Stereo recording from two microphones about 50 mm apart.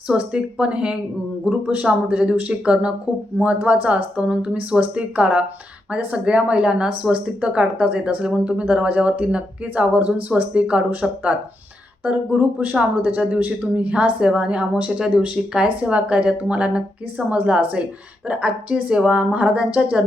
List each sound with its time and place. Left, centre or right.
0.2 s speech: right
3.3 s speech: right
10.5 s speech: right
12.0 s speech: right
13.3 s speech: right